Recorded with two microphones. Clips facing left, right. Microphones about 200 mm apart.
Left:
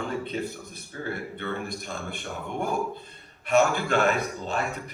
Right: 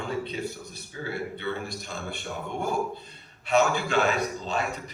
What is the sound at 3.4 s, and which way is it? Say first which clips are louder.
A man's voice: left 1 dB; 50° left (ahead or behind).